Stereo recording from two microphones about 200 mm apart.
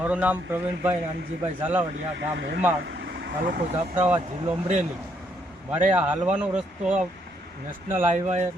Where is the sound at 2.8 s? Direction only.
55° right (ahead or behind).